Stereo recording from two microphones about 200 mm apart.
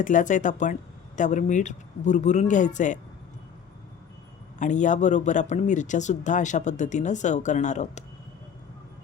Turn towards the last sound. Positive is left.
turn(degrees=35)  # may be behind; listen again after turning